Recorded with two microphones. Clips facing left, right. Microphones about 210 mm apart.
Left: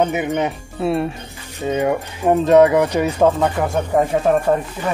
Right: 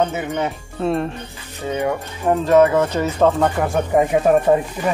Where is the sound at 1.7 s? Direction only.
15° left (ahead or behind).